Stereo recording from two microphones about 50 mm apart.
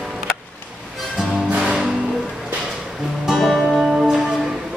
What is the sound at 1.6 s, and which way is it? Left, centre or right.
Music, centre.